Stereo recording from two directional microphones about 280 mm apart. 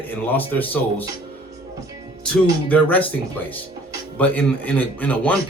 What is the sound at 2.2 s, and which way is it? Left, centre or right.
Speech, centre.